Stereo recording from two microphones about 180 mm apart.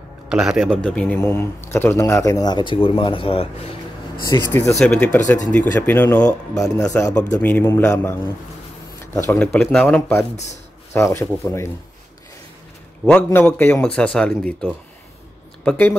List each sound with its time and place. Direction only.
0.3 s speech: 5° right (ahead or behind); by 3.7 s 30° left (ahead or behind)
4.5 s speech: 15° left (ahead or behind)
4.7 s speech: 5° left (ahead or behind)
7.3 s speech: 10° left (ahead or behind)
10.3 s speech: 40° left (ahead or behind)
10.9 s speech: 15° left (ahead or behind)
13.0 s speech: 10° left (ahead or behind)